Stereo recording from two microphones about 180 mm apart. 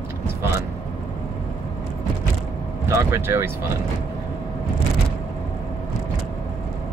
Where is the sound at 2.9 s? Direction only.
15° right (ahead or behind).